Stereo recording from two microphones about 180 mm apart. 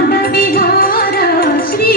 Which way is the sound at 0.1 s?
55° left (ahead or behind).